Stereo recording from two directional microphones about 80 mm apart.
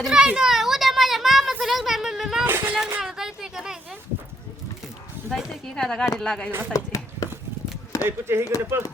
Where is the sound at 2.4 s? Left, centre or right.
Right.